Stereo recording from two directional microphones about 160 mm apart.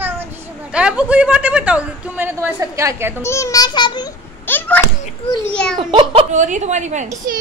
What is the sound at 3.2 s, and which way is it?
Speech, 20° left (ahead or behind).